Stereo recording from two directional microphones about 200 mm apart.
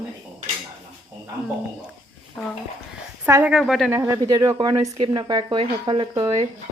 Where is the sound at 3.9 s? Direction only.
15° right (ahead or behind).